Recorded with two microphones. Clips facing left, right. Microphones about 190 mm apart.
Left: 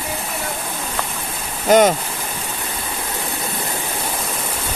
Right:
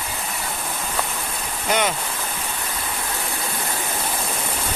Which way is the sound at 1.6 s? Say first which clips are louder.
Left 10 dB; 45° left (ahead or behind).